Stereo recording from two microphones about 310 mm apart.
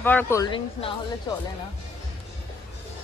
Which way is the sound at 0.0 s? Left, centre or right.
Centre.